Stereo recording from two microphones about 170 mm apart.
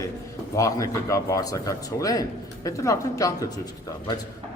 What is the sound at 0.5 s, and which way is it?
A man's voice, 20° left (ahead or behind).